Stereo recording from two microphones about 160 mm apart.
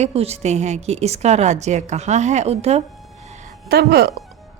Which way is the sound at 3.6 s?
80° right.